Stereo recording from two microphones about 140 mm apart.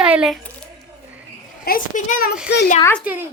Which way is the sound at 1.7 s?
80° left.